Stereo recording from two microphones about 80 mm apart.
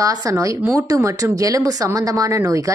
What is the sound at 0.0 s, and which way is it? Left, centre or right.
A woman's voice, right.